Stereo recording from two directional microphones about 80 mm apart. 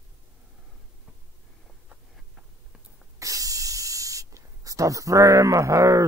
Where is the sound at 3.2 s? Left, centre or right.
Right.